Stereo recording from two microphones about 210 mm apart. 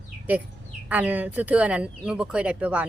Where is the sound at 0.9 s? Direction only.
5° right (ahead or behind).